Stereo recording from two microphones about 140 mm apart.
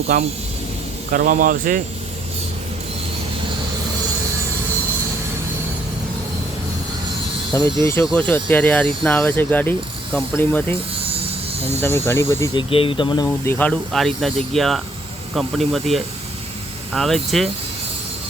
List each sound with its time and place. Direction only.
0.1 s speech: 90° right
7.5 s speech: 25° left (ahead or behind)
11.8 s speech: 15° left (ahead or behind)
12.5 s speech: 40° left (ahead or behind)
13.2 s speech: 20° left (ahead or behind); by 17.5 s centre (ahead or behind)